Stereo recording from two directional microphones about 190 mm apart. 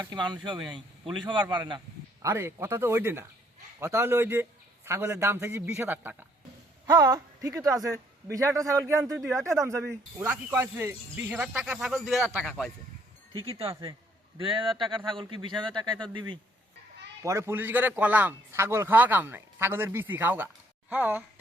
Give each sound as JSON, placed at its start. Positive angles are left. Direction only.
{"t": 0.0, "sound": "a man's voice", "side_deg": -20}
{"t": 9.2, "sound": "speech", "side_deg": 0}
{"t": 9.6, "sound": "speech", "side_deg": -15}
{"t": 13.4, "sound": "speech", "side_deg": -30}
{"t": 17.2, "sound": "a man's voice", "side_deg": -15}